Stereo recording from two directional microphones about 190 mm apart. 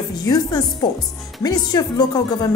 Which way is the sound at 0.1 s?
20° left (ahead or behind).